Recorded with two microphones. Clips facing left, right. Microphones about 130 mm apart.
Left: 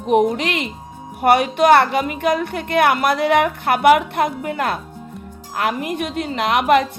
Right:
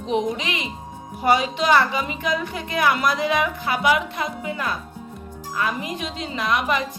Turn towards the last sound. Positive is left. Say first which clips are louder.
# left 7 dB
turn(degrees=60)  # may be behind; listen again after turning